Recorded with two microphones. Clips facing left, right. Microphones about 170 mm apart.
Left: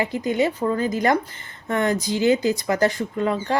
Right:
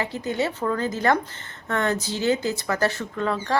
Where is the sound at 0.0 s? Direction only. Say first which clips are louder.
Left 4 dB; 15° left (ahead or behind).